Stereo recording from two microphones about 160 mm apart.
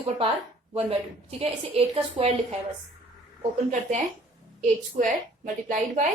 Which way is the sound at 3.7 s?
50° right (ahead or behind).